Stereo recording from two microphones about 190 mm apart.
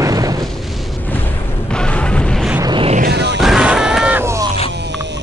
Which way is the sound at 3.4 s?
5° right (ahead or behind).